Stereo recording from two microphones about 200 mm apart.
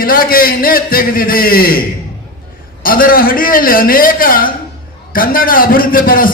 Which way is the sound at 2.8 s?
45° left (ahead or behind).